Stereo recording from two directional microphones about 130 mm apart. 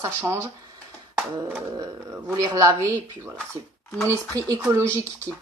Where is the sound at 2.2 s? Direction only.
25° right (ahead or behind).